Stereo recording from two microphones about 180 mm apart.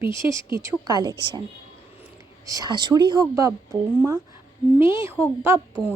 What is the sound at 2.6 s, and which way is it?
A woman's voice, 25° right (ahead or behind).